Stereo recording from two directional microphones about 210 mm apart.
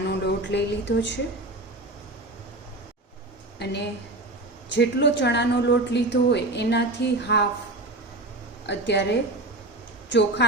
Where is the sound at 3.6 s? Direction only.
55° left (ahead or behind).